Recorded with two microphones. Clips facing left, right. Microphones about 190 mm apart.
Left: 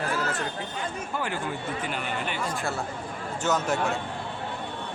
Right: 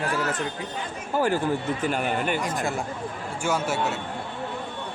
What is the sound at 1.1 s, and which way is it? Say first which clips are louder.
Speech: right 10 dB; 40° right (ahead or behind).